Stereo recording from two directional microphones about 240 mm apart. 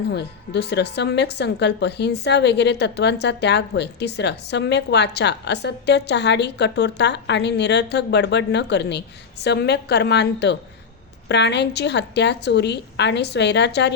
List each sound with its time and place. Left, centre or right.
0.1 s a woman's voice: left